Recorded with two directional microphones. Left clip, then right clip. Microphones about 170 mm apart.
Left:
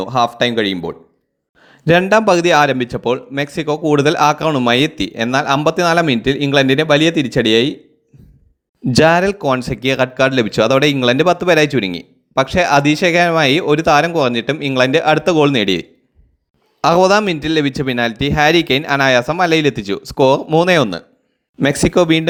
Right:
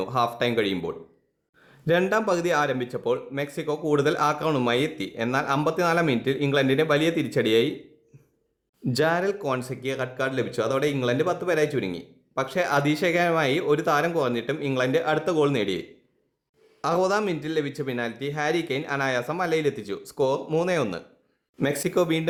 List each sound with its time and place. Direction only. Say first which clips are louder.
0.0 s speech: left 9 dB; 30° left (ahead or behind)
1.6 s a man's voice: left 10 dB; 35° left (ahead or behind)
8.9 s a man's voice: left 12 dB; 40° left (ahead or behind)